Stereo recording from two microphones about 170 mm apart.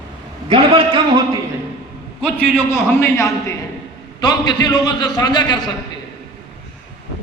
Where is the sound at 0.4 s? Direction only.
30° right (ahead or behind).